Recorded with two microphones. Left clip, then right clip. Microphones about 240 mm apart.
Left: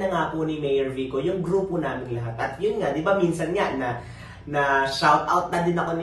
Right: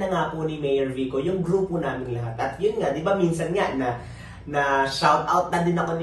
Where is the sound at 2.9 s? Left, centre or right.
Centre.